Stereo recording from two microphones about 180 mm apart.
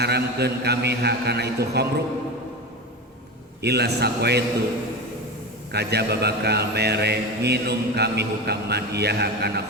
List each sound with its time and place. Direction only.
0.0 s a man's voice: 65° right (ahead or behind)
3.6 s a man's voice: 65° right (ahead or behind)
5.7 s a man's voice: 65° right (ahead or behind)